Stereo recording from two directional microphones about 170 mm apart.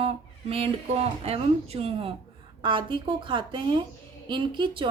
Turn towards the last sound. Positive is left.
turn(degrees=-30)  # may be behind; listen again after turning